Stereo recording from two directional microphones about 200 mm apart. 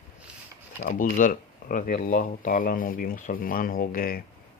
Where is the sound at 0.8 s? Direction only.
40° left (ahead or behind).